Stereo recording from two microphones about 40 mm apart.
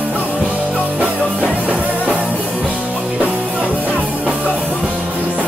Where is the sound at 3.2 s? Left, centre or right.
Right.